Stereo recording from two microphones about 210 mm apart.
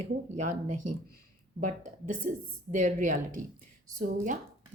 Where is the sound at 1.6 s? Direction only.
35° right (ahead or behind).